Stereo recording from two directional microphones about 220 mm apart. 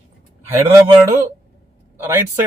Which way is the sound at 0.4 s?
10° right (ahead or behind).